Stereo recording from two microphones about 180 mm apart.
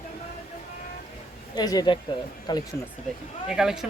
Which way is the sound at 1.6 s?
20° left (ahead or behind).